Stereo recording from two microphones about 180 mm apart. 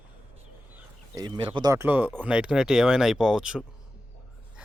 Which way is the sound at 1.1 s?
25° right (ahead or behind).